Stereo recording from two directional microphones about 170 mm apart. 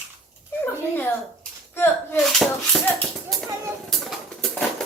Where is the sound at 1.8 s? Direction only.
10° left (ahead or behind).